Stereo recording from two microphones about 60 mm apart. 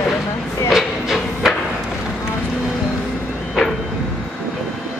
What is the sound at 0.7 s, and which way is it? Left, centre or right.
Train, centre.